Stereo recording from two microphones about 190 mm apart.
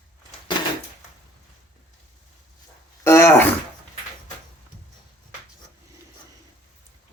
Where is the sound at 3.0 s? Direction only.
15° left (ahead or behind).